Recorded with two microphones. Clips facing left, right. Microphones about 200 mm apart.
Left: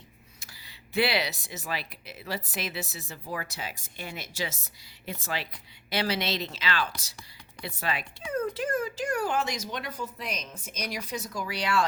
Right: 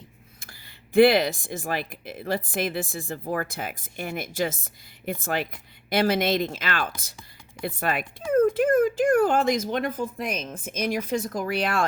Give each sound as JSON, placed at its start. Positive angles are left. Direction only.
{"t": 0.3, "sound": "speech", "side_deg": -50}